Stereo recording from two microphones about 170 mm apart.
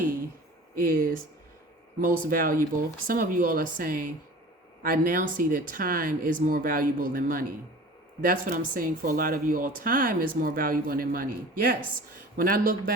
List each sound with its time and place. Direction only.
0.8 s speech: 60° right (ahead or behind)